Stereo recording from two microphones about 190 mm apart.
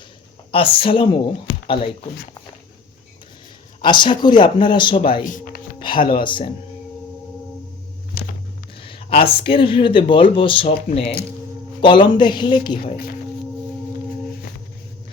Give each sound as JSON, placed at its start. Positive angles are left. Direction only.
{"t": 0.5, "sound": "speech", "side_deg": 30}
{"t": 3.8, "sound": "speech", "side_deg": 25}
{"t": 8.2, "sound": "a sound", "side_deg": 55}
{"t": 8.8, "sound": "speech", "side_deg": 30}